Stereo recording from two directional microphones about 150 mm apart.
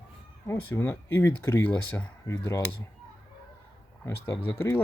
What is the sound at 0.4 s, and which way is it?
Speech, 15° left (ahead or behind).